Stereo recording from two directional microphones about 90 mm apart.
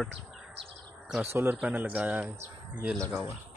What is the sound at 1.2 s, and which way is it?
Speech, 25° right (ahead or behind).